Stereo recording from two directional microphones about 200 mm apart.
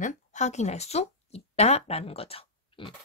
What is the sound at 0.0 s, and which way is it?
Speech, 35° left (ahead or behind).